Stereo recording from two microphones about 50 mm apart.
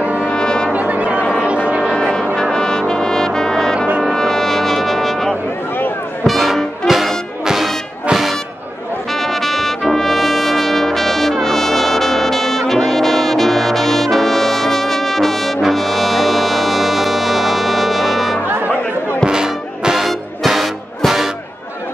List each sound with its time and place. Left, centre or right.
0.2 s brass instrument: centre
0.7 s music: right
2.0 s music: centre
2.5 s brass instrument: centre
4.1 s music: centre
6.2 s brass instrument: centre
7.4 s music: centre
9.1 s brass instrument: centre
19.2 s music: centre
20.1 s music: centre